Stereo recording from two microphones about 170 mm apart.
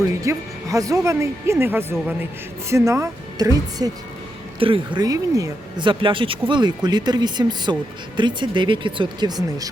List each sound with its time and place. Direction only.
0.0 s speech: 20° right (ahead or behind)